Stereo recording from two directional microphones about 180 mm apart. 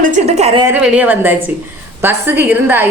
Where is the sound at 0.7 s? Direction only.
5° right (ahead or behind).